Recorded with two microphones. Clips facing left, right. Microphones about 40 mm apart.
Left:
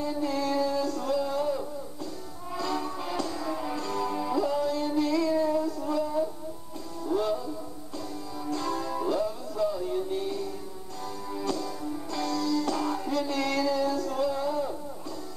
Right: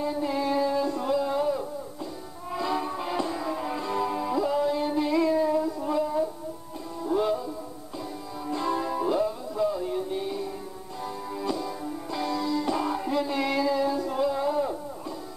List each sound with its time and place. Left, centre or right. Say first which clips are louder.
0.0 s music: right 2 dB; centre